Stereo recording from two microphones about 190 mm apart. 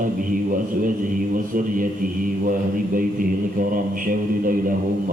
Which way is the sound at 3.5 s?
45° right (ahead or behind).